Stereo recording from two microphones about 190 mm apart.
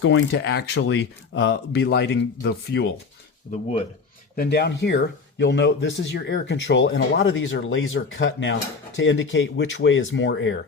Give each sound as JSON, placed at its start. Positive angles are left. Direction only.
{"t": 0.0, "sound": "speech", "side_deg": 75}
{"t": 3.5, "sound": "speech", "side_deg": 45}
{"t": 4.4, "sound": "speech", "side_deg": 60}